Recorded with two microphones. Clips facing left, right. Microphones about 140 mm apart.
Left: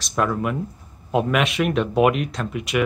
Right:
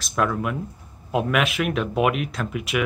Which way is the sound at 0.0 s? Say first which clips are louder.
Left 1 dB; centre (ahead or behind).